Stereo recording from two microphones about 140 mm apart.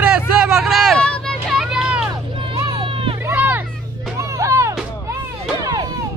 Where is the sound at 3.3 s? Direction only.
15° right (ahead or behind).